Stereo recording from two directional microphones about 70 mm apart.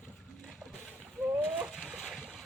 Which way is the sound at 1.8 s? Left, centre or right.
Centre.